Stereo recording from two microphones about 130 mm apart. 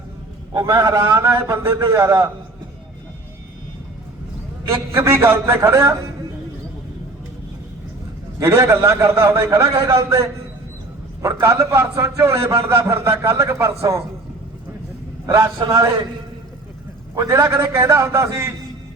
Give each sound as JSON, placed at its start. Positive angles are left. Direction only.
{"t": 0.5, "sound": "a man's voice", "side_deg": -25}
{"t": 1.0, "sound": "a man's voice", "side_deg": -15}
{"t": 4.7, "sound": "a man's voice", "side_deg": -20}
{"t": 8.4, "sound": "a man's voice", "side_deg": -20}
{"t": 15.5, "sound": "a man's voice", "side_deg": -30}
{"t": 17.2, "sound": "a man's voice", "side_deg": -25}